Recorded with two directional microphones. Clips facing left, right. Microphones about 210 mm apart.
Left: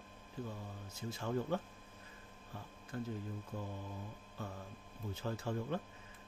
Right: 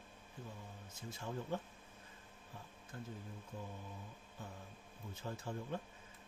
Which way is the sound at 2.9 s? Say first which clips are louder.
Left 8 dB; 70° left (ahead or behind).